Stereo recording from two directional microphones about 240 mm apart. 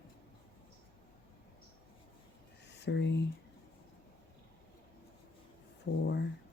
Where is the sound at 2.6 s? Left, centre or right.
Left.